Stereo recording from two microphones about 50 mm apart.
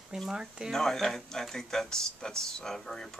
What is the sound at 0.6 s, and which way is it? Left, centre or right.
Speech, centre.